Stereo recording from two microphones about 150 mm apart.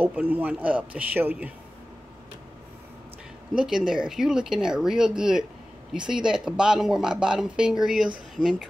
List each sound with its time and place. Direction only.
0.0 s a man's voice: 10° right (ahead or behind)
3.5 s speech: 5° right (ahead or behind)